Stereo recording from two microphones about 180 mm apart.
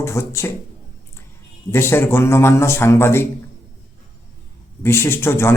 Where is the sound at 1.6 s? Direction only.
15° left (ahead or behind).